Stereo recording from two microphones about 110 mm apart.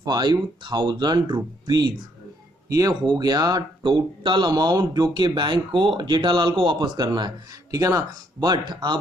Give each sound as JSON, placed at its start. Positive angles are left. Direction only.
{"t": 0.0, "sound": "speech", "side_deg": -40}